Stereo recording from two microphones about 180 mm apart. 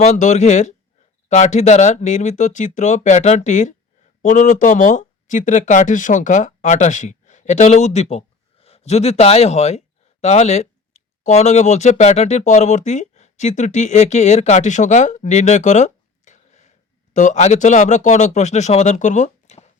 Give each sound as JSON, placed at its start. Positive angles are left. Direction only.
{"t": 0.0, "sound": "speech", "side_deg": 40}